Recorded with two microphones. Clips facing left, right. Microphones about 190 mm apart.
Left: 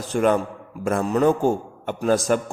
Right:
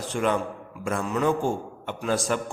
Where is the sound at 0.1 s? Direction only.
45° left (ahead or behind).